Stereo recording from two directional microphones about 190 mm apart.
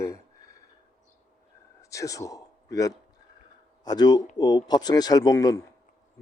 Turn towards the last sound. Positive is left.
turn(degrees=20)  # may be behind; listen again after turning